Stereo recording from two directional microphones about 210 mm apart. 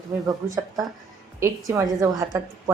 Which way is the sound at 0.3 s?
15° right (ahead or behind).